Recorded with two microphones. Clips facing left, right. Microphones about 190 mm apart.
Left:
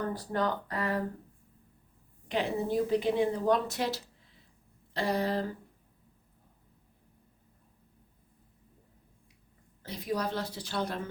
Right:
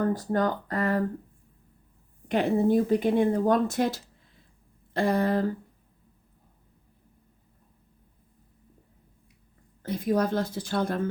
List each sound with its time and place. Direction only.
0.0 s speech: 45° right (ahead or behind)
2.2 s speech: 50° right (ahead or behind)
9.8 s speech: 50° right (ahead or behind)